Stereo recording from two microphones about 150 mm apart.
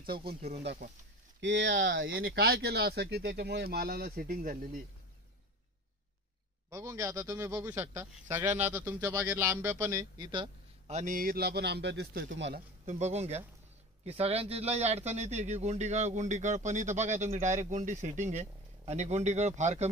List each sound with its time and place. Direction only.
0.0 s speech: 85° right
0.6 s speech: 60° right (ahead or behind)
2.0 s speech: 85° right
6.7 s a man's voice: 20° right (ahead or behind)
10.9 s speech: 50° right (ahead or behind)
11.1 s speech: 85° right
13.0 s speech: 45° right (ahead or behind)